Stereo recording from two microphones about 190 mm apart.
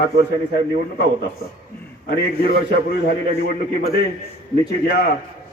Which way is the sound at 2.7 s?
55° left (ahead or behind).